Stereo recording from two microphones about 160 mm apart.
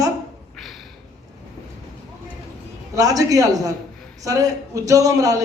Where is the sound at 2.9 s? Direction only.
20° right (ahead or behind).